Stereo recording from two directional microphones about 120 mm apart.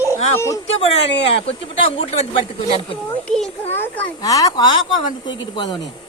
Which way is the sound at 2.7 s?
60° left (ahead or behind).